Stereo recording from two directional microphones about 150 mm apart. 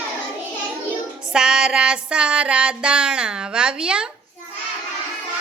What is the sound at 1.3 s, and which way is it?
Music, 5° right (ahead or behind).